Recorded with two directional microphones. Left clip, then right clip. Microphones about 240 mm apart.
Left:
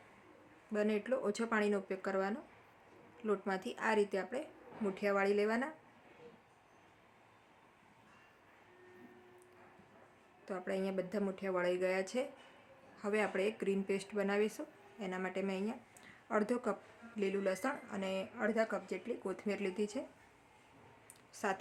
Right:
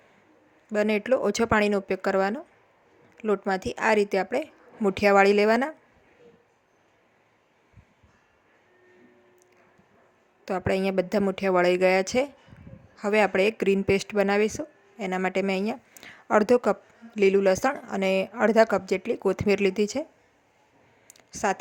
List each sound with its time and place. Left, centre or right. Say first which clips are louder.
0.7 s a woman's voice: right 12 dB; right
10.4 s a woman's voice: right 13 dB; right
21.1 s a sound: right 12 dB; right